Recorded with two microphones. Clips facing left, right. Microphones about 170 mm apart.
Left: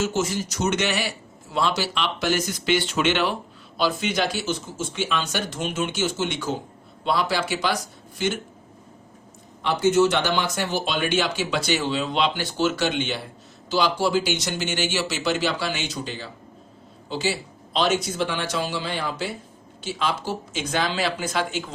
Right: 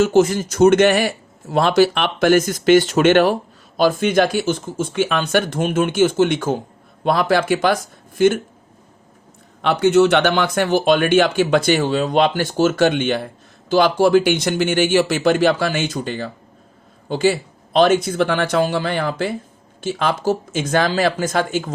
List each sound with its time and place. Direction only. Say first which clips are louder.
0.0 s speech: right 10 dB; 55° right (ahead or behind)
9.6 s speech: right 5 dB; 65° right (ahead or behind); by 21.7 s 45° right (ahead or behind)